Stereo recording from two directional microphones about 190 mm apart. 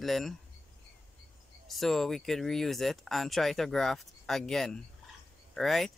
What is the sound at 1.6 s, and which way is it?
Speech, centre (ahead or behind).